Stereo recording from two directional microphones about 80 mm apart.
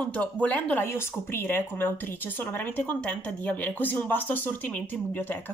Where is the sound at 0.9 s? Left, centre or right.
Left.